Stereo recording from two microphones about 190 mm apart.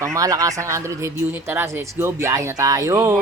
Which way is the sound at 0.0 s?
15° right (ahead or behind).